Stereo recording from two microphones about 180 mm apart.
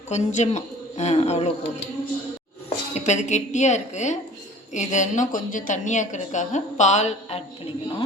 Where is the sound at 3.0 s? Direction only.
40° left (ahead or behind).